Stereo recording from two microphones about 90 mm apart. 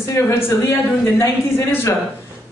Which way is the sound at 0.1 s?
30° left (ahead or behind).